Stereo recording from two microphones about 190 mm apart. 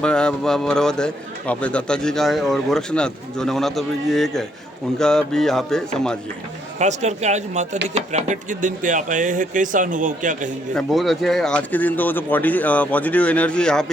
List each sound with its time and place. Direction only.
0.0 s a man's voice: 5° left (ahead or behind)
6.7 s speech: 40° right (ahead or behind)
10.8 s speech: centre (ahead or behind)